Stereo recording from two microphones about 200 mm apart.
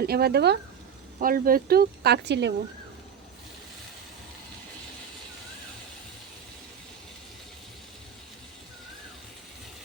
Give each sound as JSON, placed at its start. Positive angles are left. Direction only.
{"t": 0.0, "sound": "speech", "side_deg": -50}